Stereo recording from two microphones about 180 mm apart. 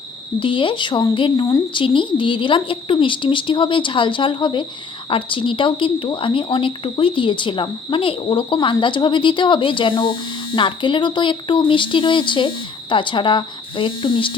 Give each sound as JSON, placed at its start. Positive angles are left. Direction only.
{"t": 0.3, "sound": "speech", "side_deg": 30}